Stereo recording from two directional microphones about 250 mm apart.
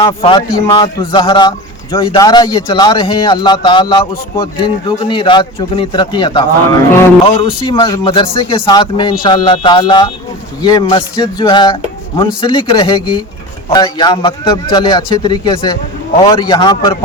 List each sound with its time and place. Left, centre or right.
0.0 s a man's voice: left